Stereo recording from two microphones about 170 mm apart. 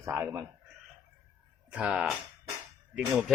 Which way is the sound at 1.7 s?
5° right (ahead or behind).